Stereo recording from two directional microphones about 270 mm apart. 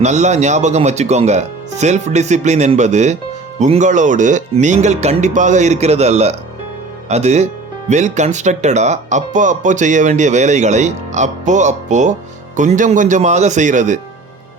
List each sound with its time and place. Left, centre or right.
0.0 s speech: right